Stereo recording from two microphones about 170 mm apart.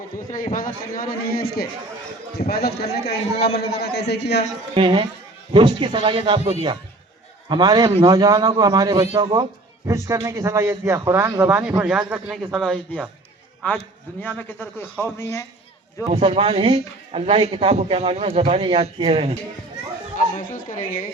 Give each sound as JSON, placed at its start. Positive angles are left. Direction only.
{"t": 0.5, "sound": "a man's voice", "side_deg": 60}
{"t": 4.7, "sound": "a man's voice", "side_deg": -30}
{"t": 7.4, "sound": "a man's voice", "side_deg": -25}
{"t": 16.1, "sound": "speech", "side_deg": -35}
{"t": 20.1, "sound": "a woman's voice", "side_deg": 55}